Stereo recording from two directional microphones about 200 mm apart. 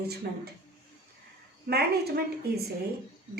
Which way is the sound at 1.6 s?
50° right (ahead or behind).